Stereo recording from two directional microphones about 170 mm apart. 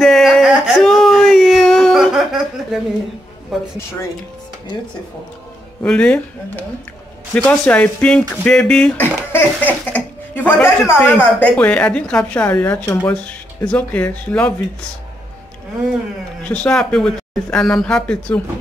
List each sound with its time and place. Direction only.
0.0 s a sound: centre (ahead or behind)
5.8 s speech: 5° left (ahead or behind)
12.8 s speech: 20° left (ahead or behind)
13.2 s speech: 10° left (ahead or behind)
16.4 s speech: 10° left (ahead or behind)